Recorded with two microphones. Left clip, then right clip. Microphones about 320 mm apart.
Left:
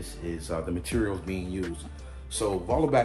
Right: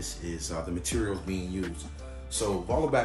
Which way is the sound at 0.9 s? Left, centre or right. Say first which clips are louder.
Left 3 dB; centre.